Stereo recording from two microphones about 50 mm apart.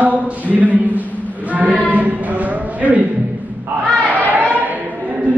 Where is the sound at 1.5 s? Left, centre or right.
Right.